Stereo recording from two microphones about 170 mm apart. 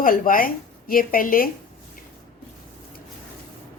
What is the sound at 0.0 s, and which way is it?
A woman's voice, 55° left (ahead or behind).